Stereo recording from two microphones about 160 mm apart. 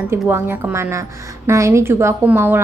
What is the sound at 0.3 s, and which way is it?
A woman's voice, 15° right (ahead or behind).